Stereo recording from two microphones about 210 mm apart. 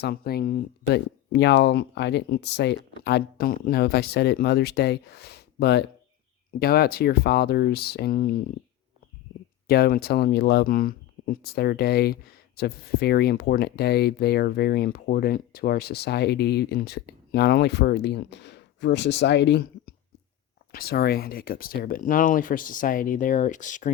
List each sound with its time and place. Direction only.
0.0 s speech: 50° left (ahead or behind)
9.6 s speech: 45° left (ahead or behind)